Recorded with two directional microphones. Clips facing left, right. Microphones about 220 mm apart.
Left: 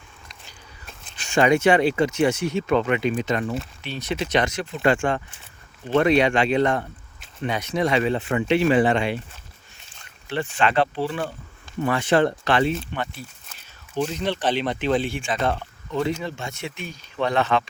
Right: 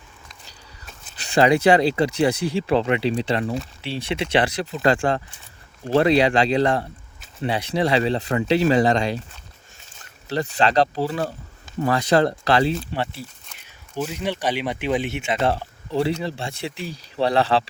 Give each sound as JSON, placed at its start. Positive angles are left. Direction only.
{"t": 1.1, "sound": "speech", "side_deg": -35}
{"t": 10.2, "sound": "speech", "side_deg": -40}
{"t": 13.9, "sound": "speech", "side_deg": -10}